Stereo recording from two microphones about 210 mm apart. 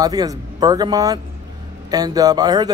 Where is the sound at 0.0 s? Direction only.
15° right (ahead or behind).